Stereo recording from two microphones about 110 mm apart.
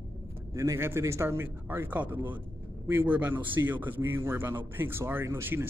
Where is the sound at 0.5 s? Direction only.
30° right (ahead or behind).